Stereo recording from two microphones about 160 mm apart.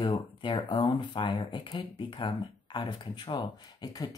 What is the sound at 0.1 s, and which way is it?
Speech, 30° left (ahead or behind).